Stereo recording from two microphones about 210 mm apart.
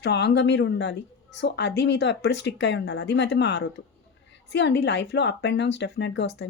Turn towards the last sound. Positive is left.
turn(degrees=55)  # may be behind; listen again after turning